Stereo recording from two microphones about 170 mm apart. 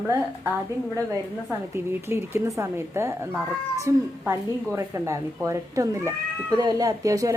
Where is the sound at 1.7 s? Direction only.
15° right (ahead or behind).